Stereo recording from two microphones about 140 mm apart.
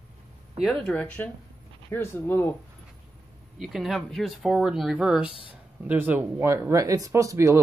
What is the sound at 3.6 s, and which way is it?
Speech, centre (ahead or behind).